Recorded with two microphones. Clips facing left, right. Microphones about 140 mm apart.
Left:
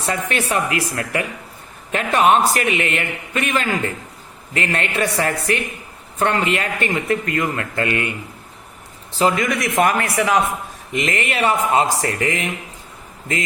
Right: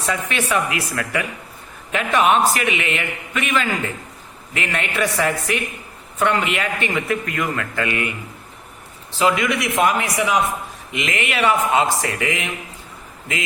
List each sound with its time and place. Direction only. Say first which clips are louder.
0.0 s a man's voice: left 1 dB; 40° left (ahead or behind)
9.1 s a man's voice: left 1 dB; 40° left (ahead or behind); by 10.3 s 60° left (ahead or behind)
10.9 s a man's voice: left 2 dB; 40° left (ahead or behind)